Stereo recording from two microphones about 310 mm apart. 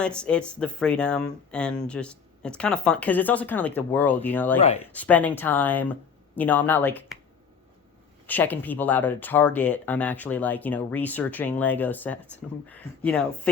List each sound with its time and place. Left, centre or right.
0.0 s speech: centre
4.6 s speech: centre
4.9 s speech: centre
8.3 s speech: centre